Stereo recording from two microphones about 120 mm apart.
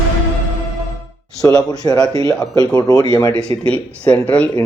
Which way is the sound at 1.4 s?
30° left (ahead or behind).